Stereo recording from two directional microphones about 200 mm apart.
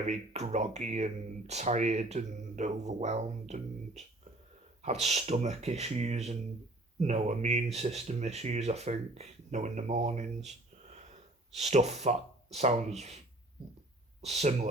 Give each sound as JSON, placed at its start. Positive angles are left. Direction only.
{"t": 0.0, "sound": "speech", "side_deg": -35}
{"t": 14.2, "sound": "speech", "side_deg": -35}